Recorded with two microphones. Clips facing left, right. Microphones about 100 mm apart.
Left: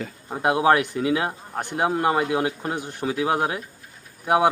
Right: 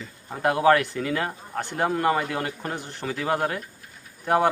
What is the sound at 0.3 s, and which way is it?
A man's voice, 20° left (ahead or behind).